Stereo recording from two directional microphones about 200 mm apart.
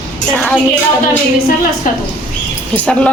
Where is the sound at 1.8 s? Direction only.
40° left (ahead or behind).